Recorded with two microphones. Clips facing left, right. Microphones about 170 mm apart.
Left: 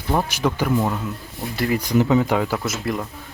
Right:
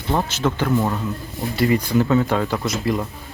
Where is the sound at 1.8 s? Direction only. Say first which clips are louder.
Even; 15° left (ahead or behind).